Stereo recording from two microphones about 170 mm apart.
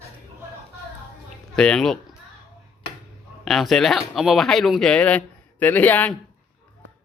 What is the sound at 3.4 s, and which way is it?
Speech, centre (ahead or behind).